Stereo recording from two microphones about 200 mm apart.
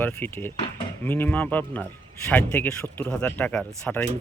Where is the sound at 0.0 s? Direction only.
10° left (ahead or behind).